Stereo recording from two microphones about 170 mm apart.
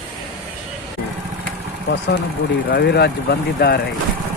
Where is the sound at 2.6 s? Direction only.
70° left (ahead or behind).